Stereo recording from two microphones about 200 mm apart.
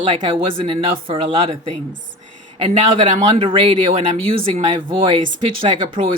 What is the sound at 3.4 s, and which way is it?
A woman's voice, 25° right (ahead or behind).